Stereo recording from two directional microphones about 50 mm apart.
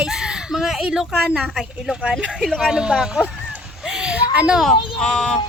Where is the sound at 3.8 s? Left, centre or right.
Centre.